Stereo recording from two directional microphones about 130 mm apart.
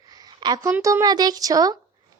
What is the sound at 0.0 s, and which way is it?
A woman's voice, 30° right (ahead or behind).